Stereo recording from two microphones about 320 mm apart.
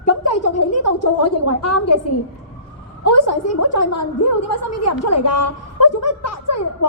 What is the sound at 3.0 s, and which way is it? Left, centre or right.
A woman's voice, left.